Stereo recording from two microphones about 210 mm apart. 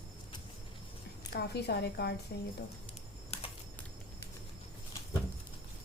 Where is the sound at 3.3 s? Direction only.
30° left (ahead or behind).